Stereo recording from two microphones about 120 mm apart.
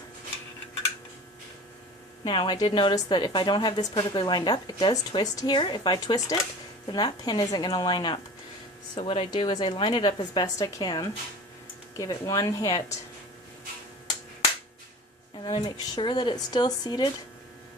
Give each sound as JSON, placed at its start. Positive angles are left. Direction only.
{"t": 2.2, "sound": "a woman's voice", "side_deg": 40}
{"t": 9.0, "sound": "speech", "side_deg": 55}
{"t": 9.3, "sound": "a woman's voice", "side_deg": 40}
{"t": 15.6, "sound": "a woman's voice", "side_deg": 40}